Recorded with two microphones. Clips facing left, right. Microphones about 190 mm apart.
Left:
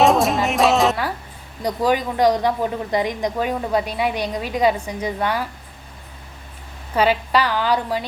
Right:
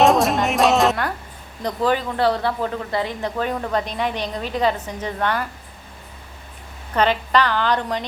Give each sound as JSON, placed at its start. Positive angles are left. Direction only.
{"t": 0.0, "sound": "music", "side_deg": 0}
{"t": 1.6, "sound": "speech", "side_deg": 10}
{"t": 6.9, "sound": "speech", "side_deg": 10}